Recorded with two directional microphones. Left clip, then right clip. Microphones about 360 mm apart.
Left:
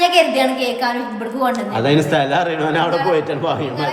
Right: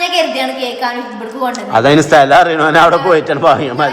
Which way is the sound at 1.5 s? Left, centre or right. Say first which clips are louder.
Right 7 dB; right.